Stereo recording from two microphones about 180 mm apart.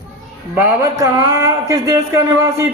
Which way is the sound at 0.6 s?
15° right (ahead or behind).